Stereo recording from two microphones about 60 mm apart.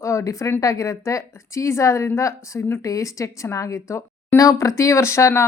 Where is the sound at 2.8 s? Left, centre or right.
Left.